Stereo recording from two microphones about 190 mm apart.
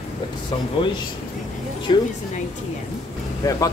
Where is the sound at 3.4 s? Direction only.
20° left (ahead or behind).